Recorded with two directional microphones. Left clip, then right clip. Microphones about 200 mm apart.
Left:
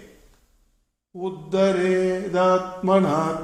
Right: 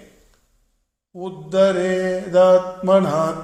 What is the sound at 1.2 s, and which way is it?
Mantra, 35° right (ahead or behind).